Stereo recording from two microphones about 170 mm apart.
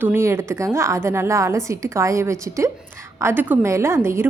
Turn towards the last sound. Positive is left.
turn(degrees=-15)  # may be behind; listen again after turning